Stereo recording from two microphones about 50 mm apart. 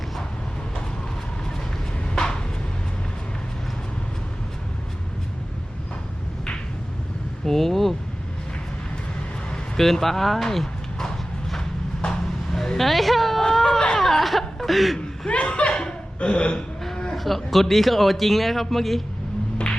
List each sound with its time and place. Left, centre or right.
2.1 s a sound: centre
7.4 s vehicle: centre
9.7 s a sound: centre
13.4 s baby cry: centre
14.0 s chuckle: centre
15.3 s chuckle: left
17.2 s a man's voice: centre